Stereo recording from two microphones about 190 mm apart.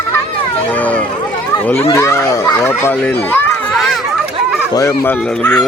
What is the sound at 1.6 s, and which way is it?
A child's voice, 10° left (ahead or behind).